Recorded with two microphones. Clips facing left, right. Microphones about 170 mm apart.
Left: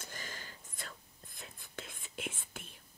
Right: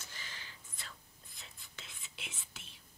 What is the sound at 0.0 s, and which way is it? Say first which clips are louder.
Whispering: left 5 dB; 45° left (ahead or behind).